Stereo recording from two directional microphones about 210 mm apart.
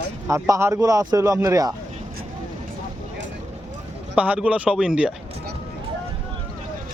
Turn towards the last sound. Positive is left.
turn(degrees=-5)  # may be behind; listen again after turning